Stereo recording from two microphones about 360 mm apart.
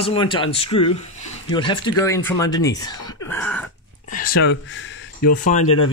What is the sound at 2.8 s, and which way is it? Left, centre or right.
Throat clearing, centre.